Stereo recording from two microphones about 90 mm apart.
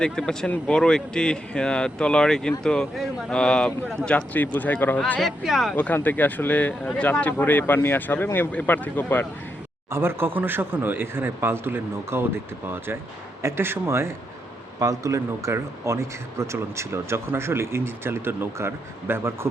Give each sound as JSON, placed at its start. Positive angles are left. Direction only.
{"t": 0.0, "sound": "speech", "side_deg": 10}
{"t": 5.2, "sound": "speech", "side_deg": 0}
{"t": 5.7, "sound": "speech", "side_deg": 20}
{"t": 9.9, "sound": "speech", "side_deg": -25}